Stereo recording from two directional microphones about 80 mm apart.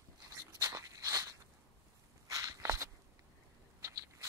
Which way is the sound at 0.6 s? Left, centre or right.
Right.